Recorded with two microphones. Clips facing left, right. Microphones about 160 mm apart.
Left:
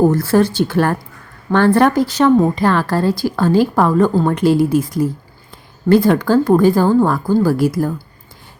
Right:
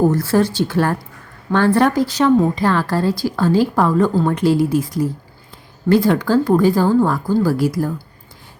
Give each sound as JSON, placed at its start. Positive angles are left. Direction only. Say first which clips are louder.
{"t": 0.2, "sound": "a woman's voice", "louder": "left 2 dB", "side_deg": 55}